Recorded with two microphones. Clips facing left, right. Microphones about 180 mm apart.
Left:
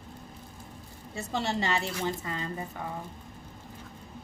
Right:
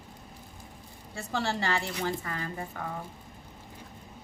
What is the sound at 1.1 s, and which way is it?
A woman's voice, 20° left (ahead or behind).